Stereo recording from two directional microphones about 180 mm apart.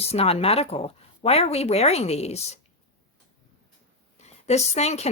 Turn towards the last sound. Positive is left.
turn(degrees=35)  # may be behind; listen again after turning